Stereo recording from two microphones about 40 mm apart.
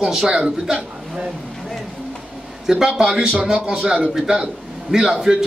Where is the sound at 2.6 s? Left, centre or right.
Centre.